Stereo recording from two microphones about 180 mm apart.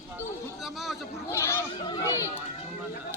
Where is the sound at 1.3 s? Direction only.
15° left (ahead or behind).